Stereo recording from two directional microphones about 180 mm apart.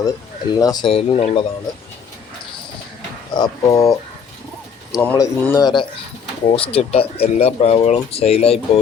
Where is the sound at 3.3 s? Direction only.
20° left (ahead or behind).